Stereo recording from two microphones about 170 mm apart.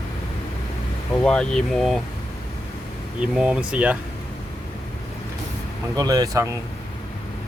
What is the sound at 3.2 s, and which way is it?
Speech, 5° right (ahead or behind).